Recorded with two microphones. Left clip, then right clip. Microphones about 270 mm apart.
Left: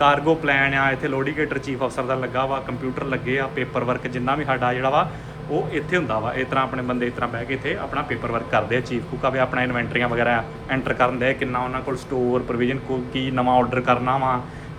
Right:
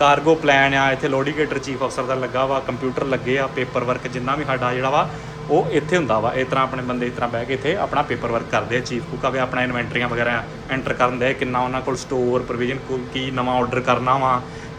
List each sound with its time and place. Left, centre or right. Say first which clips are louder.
0.0 s speech: right 3 dB; centre
5.7 s speech: right 4 dB; centre
8.3 s speech: right 1 dB; centre
12.5 s speech: even; centre